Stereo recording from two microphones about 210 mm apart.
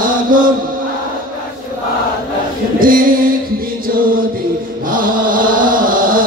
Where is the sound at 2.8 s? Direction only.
40° right (ahead or behind).